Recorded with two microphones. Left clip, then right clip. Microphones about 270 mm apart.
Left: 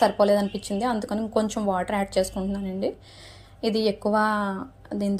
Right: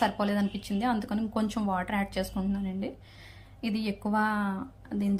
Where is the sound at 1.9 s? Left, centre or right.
Right.